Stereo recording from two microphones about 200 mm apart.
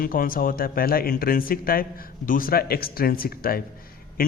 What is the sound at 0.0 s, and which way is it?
A man's voice, 45° left (ahead or behind).